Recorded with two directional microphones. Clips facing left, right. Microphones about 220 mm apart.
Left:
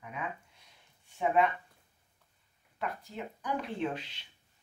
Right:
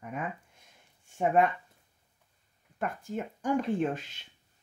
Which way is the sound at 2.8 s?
50° right (ahead or behind).